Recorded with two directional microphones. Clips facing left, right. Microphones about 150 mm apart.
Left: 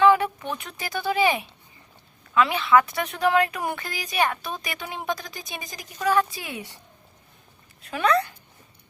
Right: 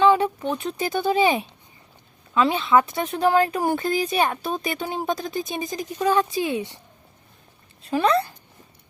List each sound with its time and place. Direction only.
0.0 s speech: 25° right (ahead or behind)
7.8 s speech: 30° right (ahead or behind)